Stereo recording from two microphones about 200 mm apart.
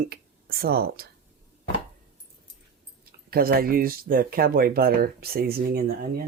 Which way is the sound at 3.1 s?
50° right (ahead or behind).